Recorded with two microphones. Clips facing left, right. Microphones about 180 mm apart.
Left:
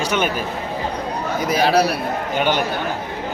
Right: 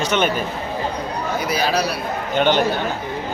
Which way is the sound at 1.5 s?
55° left (ahead or behind).